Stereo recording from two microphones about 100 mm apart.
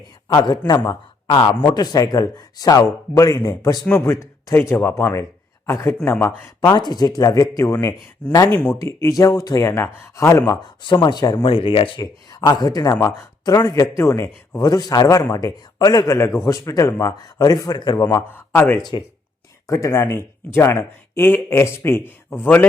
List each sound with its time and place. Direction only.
0.3 s speech: 45° left (ahead or behind)
1.7 s speech: 40° left (ahead or behind)
3.8 s speech: 20° left (ahead or behind)
6.7 s speech: 45° left (ahead or behind)
8.2 s speech: 10° left (ahead or behind)
8.8 s speech: 35° left (ahead or behind)
10.5 s speech: 45° left (ahead or behind)
11.4 s speech: 65° left (ahead or behind)
11.9 s speech: 40° left (ahead or behind)
14.6 s speech: 40° left (ahead or behind)
16.1 s speech: 25° left (ahead or behind); by 18.0 s 45° left (ahead or behind)
18.0 s speech: 25° left (ahead or behind)
18.8 s speech: 45° left (ahead or behind)
19.6 s speech: 30° left (ahead or behind)